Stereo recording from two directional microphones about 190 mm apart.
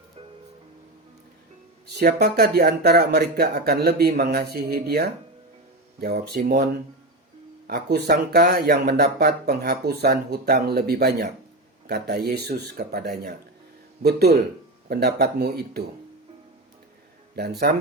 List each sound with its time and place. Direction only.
2.0 s speech: 60° right (ahead or behind)
7.7 s speech: 60° right (ahead or behind)
17.3 s speech: 55° right (ahead or behind)